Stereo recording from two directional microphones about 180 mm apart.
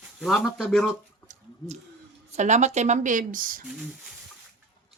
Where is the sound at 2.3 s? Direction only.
40° right (ahead or behind).